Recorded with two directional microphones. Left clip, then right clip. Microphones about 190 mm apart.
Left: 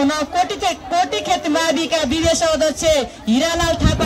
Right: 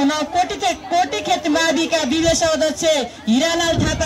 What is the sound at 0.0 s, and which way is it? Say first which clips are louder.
Speech: even; centre (ahead or behind).